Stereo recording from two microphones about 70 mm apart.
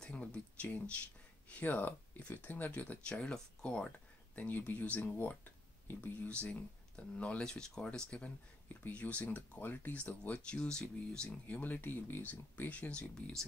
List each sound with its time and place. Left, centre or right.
0.0 s speech: centre
6.4 s speech: centre
8.8 s speech: left
13.4 s speech: centre